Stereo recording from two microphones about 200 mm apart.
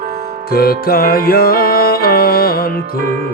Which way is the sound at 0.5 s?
50° left (ahead or behind).